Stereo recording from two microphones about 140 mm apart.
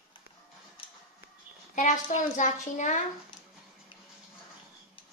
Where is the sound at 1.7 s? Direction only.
65° left (ahead or behind).